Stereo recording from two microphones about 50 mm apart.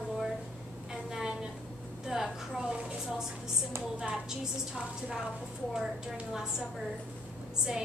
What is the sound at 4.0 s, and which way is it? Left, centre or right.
A woman's voice, centre.